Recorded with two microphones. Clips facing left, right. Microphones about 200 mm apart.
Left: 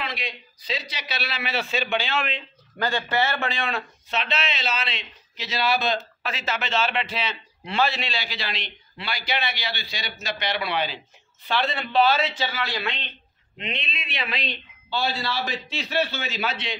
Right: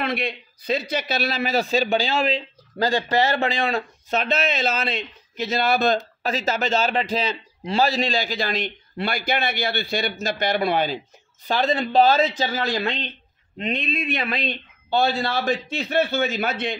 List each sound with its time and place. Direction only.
0.0 s a man's voice: 55° right (ahead or behind)